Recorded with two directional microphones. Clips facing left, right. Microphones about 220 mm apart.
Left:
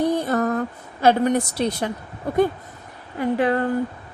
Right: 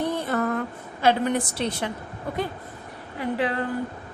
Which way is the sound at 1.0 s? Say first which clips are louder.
Left 4 dB; 45° left (ahead or behind).